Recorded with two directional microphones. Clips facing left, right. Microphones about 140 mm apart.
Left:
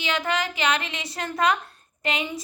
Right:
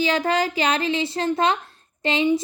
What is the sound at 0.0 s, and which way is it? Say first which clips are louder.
A woman's voice: right 5 dB; 35° right (ahead or behind).